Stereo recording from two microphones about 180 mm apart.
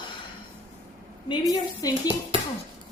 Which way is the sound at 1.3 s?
20° left (ahead or behind).